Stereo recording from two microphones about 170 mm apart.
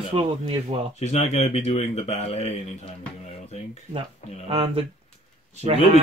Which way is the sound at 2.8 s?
40° left (ahead or behind).